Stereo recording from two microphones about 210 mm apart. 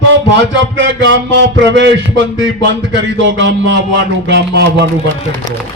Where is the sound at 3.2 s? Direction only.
60° right (ahead or behind).